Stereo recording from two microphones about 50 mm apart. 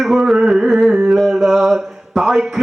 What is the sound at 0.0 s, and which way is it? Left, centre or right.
Carnatic music, centre.